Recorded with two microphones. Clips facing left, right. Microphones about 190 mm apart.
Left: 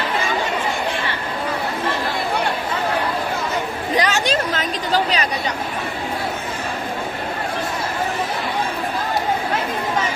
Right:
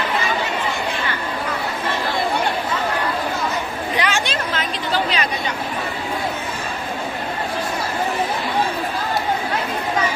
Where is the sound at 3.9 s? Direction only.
40° left (ahead or behind).